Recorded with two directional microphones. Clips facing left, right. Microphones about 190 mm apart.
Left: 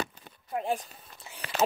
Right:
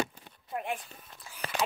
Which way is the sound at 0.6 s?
30° left (ahead or behind).